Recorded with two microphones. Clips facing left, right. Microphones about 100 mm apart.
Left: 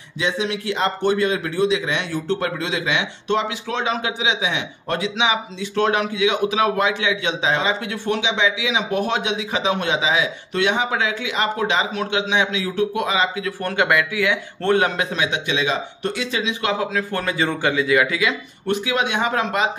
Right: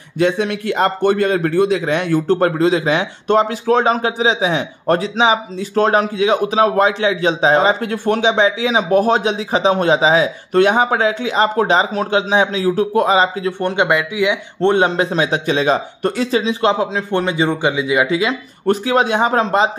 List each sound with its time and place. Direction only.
0.2 s a man's voice: 55° right (ahead or behind); by 13.5 s 35° right (ahead or behind)
13.6 s a man's voice: 20° right (ahead or behind); by 16.7 s 35° right (ahead or behind)
16.9 s speech: 25° right (ahead or behind)
18.7 s a man's voice: 40° right (ahead or behind)